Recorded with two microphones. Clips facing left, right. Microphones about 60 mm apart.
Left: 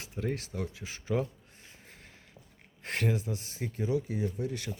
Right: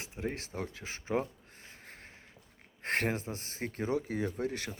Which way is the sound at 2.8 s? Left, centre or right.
Right.